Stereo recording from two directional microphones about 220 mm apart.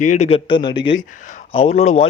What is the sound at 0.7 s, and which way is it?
Speech, 55° left (ahead or behind).